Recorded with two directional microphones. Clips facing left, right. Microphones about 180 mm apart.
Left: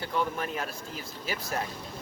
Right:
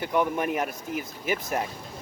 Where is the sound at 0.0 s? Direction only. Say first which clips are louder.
Right 5 dB; 15° right (ahead or behind).